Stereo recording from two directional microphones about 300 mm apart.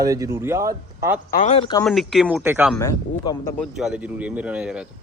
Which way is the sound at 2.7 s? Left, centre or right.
Centre.